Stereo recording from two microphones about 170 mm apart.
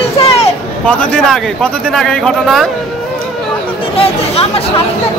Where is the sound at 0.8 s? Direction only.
5° left (ahead or behind).